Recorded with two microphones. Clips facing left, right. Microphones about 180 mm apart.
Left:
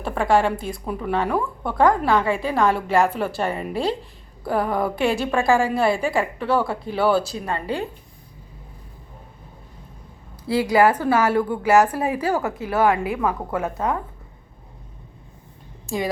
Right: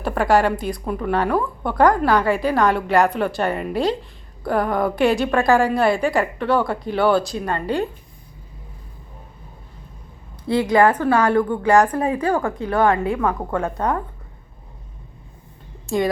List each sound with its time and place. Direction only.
0.0 s a woman's voice: 5° right (ahead or behind)
10.4 s a woman's voice: 10° left (ahead or behind)